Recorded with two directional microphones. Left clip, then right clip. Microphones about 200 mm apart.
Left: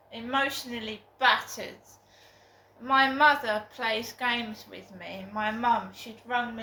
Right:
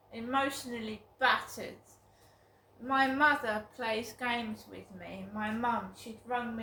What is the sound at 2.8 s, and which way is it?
A woman's voice, 20° right (ahead or behind).